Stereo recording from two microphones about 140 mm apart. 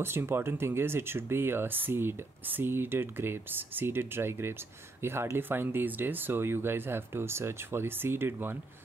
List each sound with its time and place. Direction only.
0.0 s speech: 15° right (ahead or behind)